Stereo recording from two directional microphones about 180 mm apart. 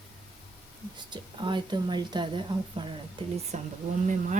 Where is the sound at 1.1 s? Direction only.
25° right (ahead or behind).